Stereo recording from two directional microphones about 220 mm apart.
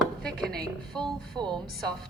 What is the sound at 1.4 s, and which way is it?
Speech, 20° right (ahead or behind).